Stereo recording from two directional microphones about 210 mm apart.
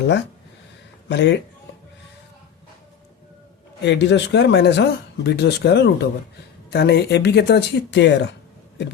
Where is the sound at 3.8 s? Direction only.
55° left (ahead or behind).